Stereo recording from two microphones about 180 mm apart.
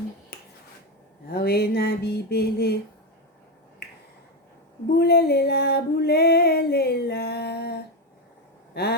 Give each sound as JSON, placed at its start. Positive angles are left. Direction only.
{"t": 0.3, "sound": "finger snapping", "side_deg": 55}
{"t": 1.3, "sound": "female singing", "side_deg": 60}
{"t": 4.9, "sound": "female singing", "side_deg": 65}
{"t": 8.7, "sound": "speech", "side_deg": 65}